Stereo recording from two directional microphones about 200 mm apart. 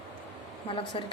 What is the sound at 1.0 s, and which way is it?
Speech, 25° left (ahead or behind).